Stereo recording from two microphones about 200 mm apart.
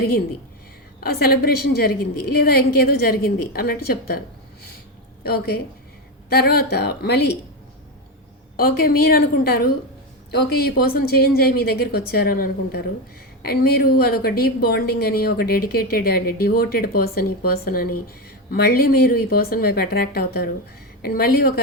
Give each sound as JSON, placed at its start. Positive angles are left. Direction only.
{"t": 1.0, "sound": "a woman's voice", "side_deg": 50}
{"t": 5.2, "sound": "a woman's voice", "side_deg": 50}
{"t": 8.5, "sound": "a woman's voice", "side_deg": 45}